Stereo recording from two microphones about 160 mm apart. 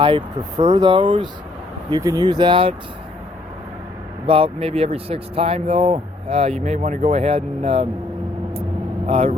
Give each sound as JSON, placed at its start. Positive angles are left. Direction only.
{"t": 0.0, "sound": "speech", "side_deg": -30}
{"t": 4.3, "sound": "speech", "side_deg": -35}
{"t": 9.0, "sound": "speech", "side_deg": -40}